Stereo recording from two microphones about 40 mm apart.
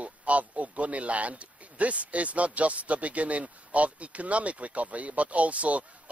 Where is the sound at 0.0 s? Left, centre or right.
Right.